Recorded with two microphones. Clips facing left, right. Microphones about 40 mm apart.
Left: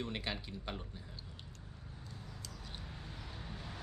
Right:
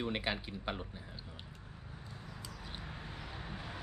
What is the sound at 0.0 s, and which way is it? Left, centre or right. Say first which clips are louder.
Speech: right 4 dB; right.